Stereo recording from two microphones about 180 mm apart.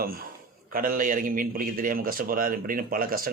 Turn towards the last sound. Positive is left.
turn(degrees=-55)  # may be behind; listen again after turning